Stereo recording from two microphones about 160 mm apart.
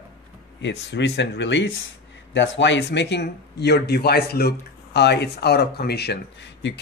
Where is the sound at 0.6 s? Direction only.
90° left.